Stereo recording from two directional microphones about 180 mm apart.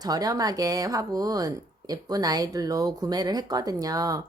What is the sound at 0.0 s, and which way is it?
Speech, 20° right (ahead or behind).